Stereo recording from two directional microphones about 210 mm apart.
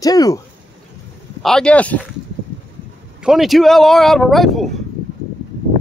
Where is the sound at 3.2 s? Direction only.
Centre (ahead or behind).